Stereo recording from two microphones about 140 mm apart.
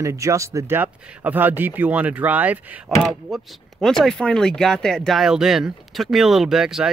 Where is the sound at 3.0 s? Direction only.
5° left (ahead or behind).